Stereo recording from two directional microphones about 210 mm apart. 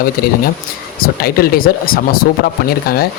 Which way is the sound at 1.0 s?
45° left (ahead or behind).